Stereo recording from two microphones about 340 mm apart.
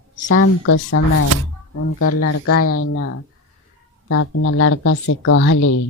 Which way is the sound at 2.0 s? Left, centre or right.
Left.